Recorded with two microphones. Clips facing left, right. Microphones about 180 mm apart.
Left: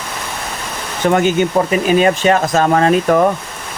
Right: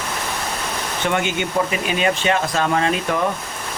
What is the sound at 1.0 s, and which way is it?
Speech, 40° left (ahead or behind).